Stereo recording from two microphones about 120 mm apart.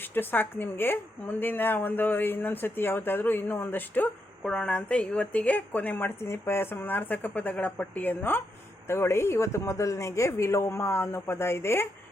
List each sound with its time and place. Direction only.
0.0 s speech: 15° left (ahead or behind)